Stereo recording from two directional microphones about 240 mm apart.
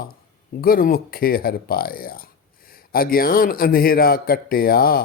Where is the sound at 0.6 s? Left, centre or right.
Left.